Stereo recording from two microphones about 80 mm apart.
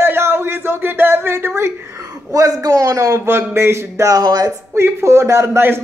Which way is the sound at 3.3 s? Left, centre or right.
Right.